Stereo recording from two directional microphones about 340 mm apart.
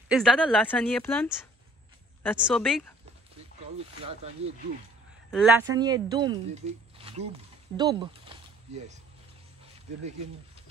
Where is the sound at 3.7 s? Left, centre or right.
Centre.